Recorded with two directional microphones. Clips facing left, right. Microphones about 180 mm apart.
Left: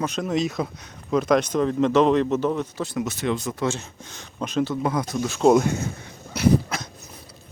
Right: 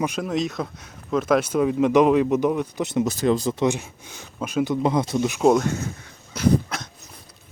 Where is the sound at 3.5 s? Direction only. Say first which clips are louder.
Right 4 dB; 15° right (ahead or behind).